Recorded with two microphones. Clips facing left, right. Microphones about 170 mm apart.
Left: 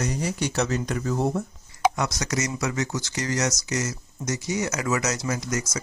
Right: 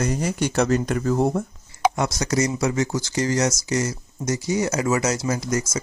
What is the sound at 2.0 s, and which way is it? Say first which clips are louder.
Speech: right 5 dB; 30° right (ahead or behind).